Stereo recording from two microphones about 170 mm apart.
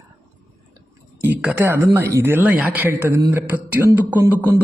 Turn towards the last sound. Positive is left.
turn(degrees=-10)  # may be behind; listen again after turning